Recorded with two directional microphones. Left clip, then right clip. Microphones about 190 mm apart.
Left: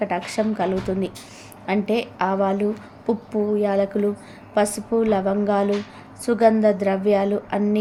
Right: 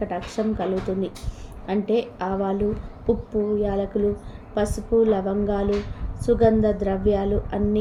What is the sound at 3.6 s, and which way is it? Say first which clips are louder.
A woman's voice: left 3 dB; 10° left (ahead or behind).